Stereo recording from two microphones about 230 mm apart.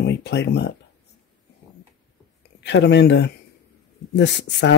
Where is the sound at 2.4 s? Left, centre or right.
Left.